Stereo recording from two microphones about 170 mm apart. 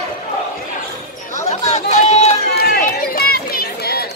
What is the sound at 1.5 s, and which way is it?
Chatter, 40° left (ahead or behind).